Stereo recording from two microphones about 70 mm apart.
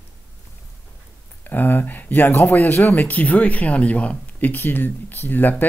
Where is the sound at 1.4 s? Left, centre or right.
Left.